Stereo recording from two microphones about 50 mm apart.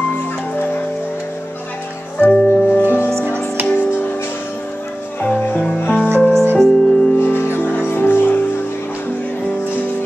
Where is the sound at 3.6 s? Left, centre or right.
Right.